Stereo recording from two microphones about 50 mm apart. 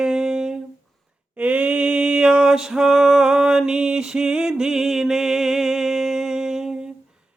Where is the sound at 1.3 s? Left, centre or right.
Right; by 6.7 s centre.